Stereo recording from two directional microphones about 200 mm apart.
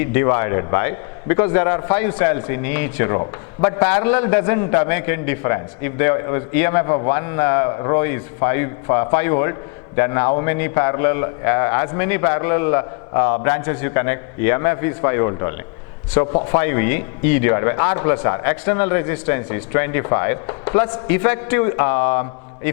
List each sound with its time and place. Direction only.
0.0 s a man's voice: 15° left (ahead or behind)